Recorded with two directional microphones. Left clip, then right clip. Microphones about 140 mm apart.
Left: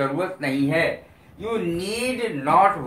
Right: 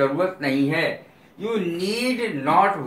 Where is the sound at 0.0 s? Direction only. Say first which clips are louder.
Right 3 dB; 40° left (ahead or behind).